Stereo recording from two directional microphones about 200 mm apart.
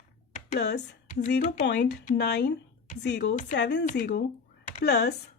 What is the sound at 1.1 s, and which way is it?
Speech, 45° left (ahead or behind).